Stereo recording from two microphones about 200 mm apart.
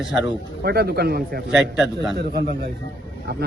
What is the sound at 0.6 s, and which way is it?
Speech, 50° right (ahead or behind).